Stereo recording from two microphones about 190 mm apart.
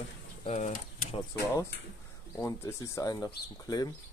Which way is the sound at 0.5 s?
40° left (ahead or behind).